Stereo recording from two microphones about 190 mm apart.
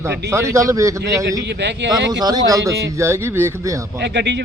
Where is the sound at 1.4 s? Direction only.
65° right (ahead or behind).